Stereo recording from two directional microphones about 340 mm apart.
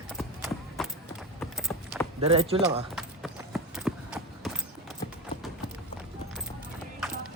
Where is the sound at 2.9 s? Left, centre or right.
Centre.